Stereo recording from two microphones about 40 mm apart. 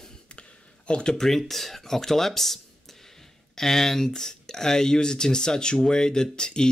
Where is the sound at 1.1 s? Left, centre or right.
Centre.